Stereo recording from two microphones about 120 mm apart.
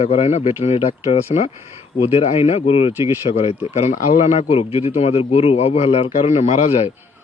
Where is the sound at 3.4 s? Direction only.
65° left (ahead or behind).